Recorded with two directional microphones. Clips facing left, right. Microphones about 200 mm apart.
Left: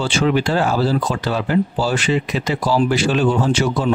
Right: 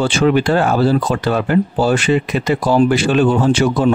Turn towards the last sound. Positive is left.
turn(degrees=-55)  # may be behind; listen again after turning